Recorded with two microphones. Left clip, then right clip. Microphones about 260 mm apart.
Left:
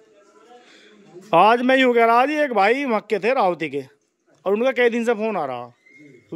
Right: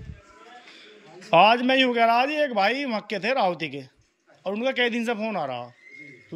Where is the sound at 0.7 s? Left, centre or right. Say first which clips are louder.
Right 1 dB; centre.